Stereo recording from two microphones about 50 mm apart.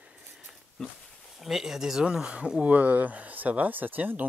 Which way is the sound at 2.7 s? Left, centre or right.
Right.